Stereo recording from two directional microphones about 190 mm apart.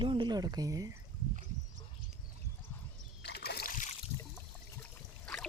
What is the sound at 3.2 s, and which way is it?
Splash, 60° left (ahead or behind).